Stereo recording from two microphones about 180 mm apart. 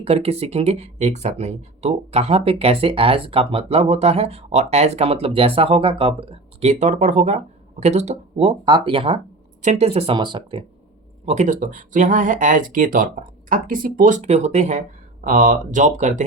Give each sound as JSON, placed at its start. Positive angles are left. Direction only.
{"t": 0.0, "sound": "speech", "side_deg": -35}
{"t": 11.3, "sound": "speech", "side_deg": -45}